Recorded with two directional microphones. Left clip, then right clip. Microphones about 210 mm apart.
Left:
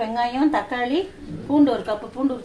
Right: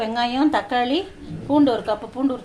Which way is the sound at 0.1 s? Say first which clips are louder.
Right 2 dB; 30° right (ahead or behind).